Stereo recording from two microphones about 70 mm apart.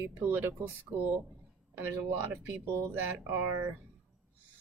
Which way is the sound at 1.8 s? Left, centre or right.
Right.